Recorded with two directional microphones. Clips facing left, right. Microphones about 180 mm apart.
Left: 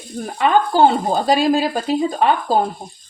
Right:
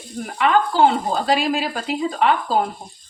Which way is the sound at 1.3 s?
40° left (ahead or behind).